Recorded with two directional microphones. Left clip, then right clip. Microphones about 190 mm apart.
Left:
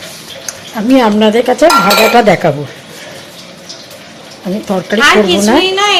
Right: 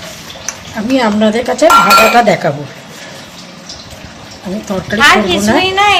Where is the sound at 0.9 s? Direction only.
40° left (ahead or behind).